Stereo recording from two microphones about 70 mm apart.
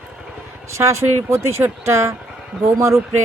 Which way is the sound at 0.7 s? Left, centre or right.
Right.